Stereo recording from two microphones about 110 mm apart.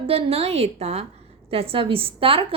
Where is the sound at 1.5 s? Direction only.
60° right (ahead or behind).